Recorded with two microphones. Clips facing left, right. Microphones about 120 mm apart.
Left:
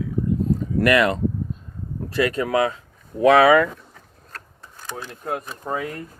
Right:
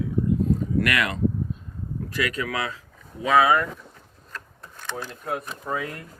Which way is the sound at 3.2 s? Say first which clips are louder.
Left 6 dB; 70° left (ahead or behind).